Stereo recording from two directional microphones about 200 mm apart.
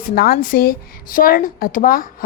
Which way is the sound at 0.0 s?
50° left (ahead or behind).